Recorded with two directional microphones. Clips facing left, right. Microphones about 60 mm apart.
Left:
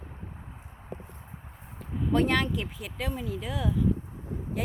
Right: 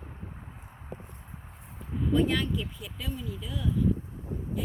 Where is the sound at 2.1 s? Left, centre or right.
Left.